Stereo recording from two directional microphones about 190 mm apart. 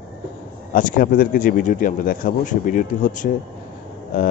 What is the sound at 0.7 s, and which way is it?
Speech, 45° left (ahead or behind).